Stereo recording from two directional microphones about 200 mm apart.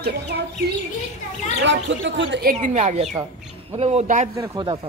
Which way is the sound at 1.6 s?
65° right (ahead or behind).